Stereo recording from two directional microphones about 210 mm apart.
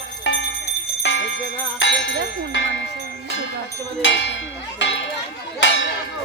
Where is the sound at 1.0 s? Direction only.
60° left (ahead or behind).